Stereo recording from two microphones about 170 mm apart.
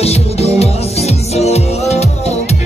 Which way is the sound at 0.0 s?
40° left (ahead or behind).